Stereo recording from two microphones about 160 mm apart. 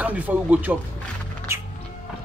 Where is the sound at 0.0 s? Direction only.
10° right (ahead or behind).